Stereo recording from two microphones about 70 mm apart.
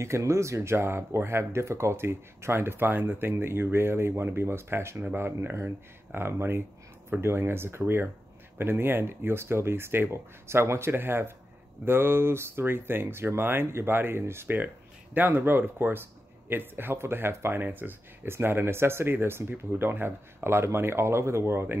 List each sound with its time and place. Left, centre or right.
0.0 s speech: right